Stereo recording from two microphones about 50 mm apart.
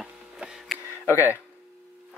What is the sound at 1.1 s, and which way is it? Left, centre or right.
Speech, left.